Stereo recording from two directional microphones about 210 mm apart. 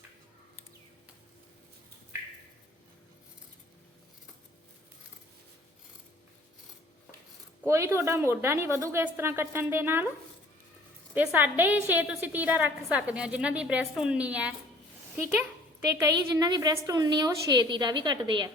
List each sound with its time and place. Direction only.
7.7 s a woman's voice: 15° right (ahead or behind)
11.1 s a woman's voice: 10° right (ahead or behind)